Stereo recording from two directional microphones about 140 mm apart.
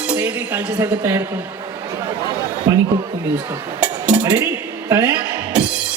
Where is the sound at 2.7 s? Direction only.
20° right (ahead or behind).